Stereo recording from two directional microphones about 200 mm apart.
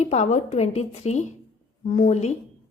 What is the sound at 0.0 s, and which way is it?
A woman's voice, 35° left (ahead or behind).